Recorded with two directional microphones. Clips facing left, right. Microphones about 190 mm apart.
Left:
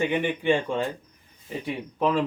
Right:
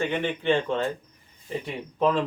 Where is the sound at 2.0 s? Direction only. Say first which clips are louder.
Right 1 dB; 5° left (ahead or behind).